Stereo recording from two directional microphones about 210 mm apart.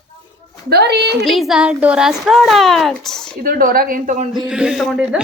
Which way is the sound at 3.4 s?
45° right (ahead or behind).